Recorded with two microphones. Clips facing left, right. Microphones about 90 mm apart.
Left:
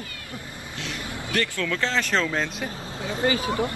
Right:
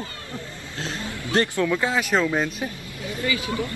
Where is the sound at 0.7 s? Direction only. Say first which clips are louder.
Right 3 dB; 35° right (ahead or behind).